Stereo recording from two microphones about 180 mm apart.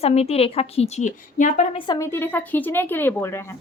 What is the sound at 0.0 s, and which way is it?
A woman's voice, 35° left (ahead or behind).